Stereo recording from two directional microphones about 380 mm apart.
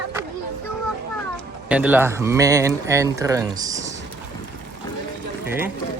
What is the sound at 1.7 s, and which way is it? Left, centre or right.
Speech, centre.